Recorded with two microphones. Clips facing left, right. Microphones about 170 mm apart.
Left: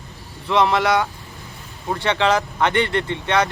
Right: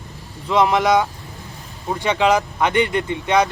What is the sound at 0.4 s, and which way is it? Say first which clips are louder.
Speech: right 1 dB; 15° right (ahead or behind).